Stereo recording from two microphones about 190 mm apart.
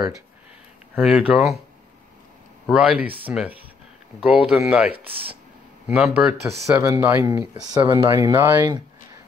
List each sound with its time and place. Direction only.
0.9 s speech: 5° right (ahead or behind)
2.6 s speech: 5° right (ahead or behind)
7.2 s speech: 20° right (ahead or behind)